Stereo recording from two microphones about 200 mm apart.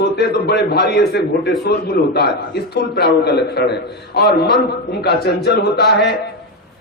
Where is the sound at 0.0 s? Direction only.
55° left (ahead or behind).